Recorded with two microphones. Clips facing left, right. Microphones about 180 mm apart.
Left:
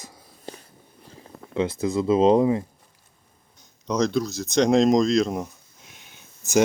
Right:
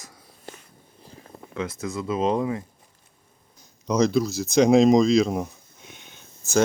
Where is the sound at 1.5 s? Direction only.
30° left (ahead or behind).